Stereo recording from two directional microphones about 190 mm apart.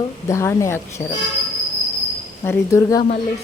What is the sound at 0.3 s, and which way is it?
Speech, 15° left (ahead or behind).